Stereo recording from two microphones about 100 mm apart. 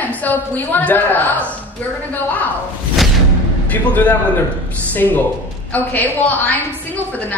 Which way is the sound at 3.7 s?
15° left (ahead or behind).